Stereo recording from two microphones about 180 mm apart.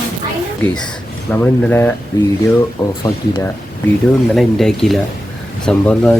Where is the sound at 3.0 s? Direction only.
20° left (ahead or behind).